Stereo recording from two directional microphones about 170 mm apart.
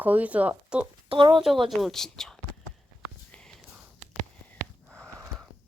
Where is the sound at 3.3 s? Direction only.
5° left (ahead or behind).